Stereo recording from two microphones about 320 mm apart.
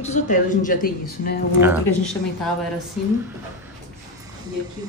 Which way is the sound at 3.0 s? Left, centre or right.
Centre.